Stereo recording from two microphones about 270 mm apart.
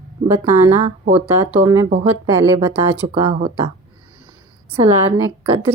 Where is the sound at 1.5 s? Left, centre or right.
Centre.